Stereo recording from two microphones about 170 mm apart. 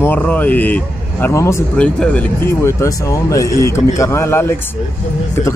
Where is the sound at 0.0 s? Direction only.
10° left (ahead or behind).